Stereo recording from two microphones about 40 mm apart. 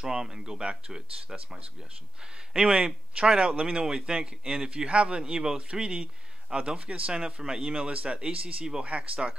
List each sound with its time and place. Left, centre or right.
0.0 s speech: centre
3.6 s speech: centre; by 9.3 s right